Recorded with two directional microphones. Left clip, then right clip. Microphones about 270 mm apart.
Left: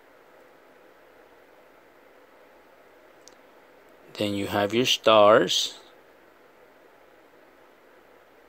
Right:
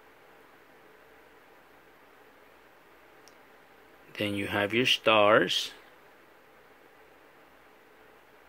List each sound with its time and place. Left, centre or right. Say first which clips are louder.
4.1 s speech: left 4 dB; left